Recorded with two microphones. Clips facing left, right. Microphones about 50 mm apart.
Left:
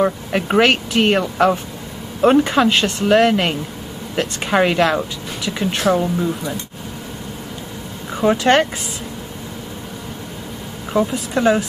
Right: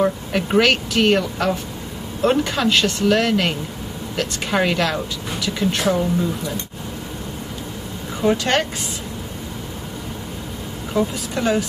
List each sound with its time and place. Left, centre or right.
0.0 s speech: centre
5.8 s speech: centre
8.2 s speech: centre
10.9 s speech: centre